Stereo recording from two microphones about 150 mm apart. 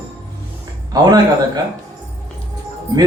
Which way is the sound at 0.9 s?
25° right (ahead or behind).